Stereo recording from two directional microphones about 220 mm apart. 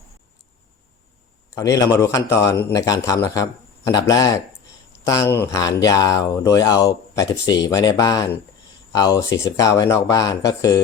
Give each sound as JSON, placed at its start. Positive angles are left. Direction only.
{"t": 1.5, "sound": "speech", "side_deg": 15}